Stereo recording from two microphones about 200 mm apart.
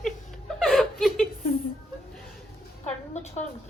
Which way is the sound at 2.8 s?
35° left (ahead or behind).